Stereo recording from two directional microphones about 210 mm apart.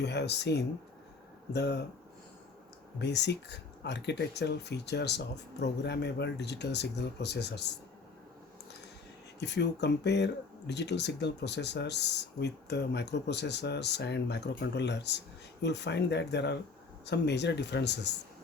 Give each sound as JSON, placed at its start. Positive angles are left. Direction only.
{"t": 0.0, "sound": "speech", "side_deg": 50}
{"t": 3.0, "sound": "speech", "side_deg": 55}
{"t": 9.4, "sound": "speech", "side_deg": 55}